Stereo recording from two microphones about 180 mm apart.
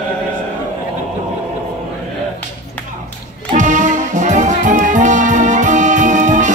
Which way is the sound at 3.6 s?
45° right (ahead or behind).